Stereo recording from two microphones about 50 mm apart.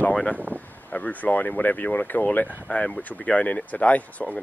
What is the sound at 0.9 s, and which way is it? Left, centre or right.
Speech, left.